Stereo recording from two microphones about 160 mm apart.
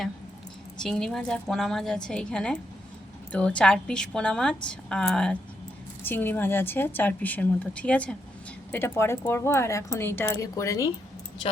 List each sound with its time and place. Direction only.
0.8 s a woman's voice: 5° left (ahead or behind); by 10.8 s 20° left (ahead or behind)